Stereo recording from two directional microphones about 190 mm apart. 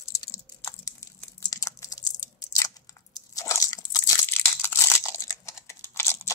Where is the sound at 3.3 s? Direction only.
15° left (ahead or behind).